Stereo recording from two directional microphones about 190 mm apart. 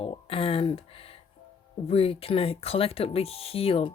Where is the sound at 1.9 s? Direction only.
30° left (ahead or behind).